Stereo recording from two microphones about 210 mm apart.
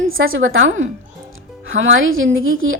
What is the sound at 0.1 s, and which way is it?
A woman's voice, 75° right (ahead or behind).